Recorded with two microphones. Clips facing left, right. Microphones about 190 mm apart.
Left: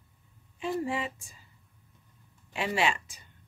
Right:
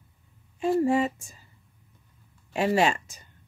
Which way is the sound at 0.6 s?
45° right (ahead or behind).